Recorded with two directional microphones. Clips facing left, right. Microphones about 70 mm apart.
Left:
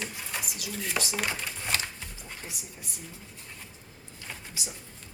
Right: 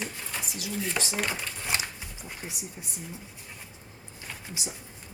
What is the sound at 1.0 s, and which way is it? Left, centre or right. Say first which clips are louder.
Speech: left 4 dB; centre.